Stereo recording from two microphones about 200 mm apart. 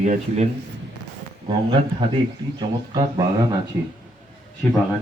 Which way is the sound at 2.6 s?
20° right (ahead or behind).